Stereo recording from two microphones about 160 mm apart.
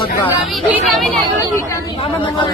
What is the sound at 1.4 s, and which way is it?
Speech, 20° left (ahead or behind).